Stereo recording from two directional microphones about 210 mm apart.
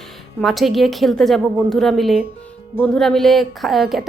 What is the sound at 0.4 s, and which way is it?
A woman's voice, centre (ahead or behind).